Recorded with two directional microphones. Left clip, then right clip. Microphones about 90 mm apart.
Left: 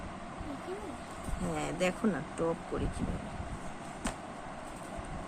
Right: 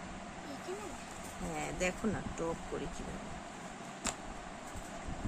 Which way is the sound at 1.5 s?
20° left (ahead or behind).